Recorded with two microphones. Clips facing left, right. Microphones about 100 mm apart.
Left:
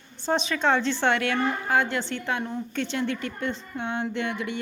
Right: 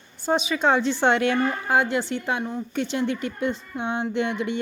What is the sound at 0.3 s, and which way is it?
A woman's voice, 5° right (ahead or behind).